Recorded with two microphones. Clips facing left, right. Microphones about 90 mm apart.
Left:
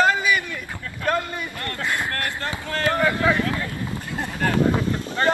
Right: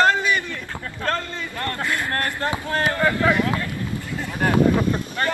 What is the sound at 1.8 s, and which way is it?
Speech, 15° left (ahead or behind).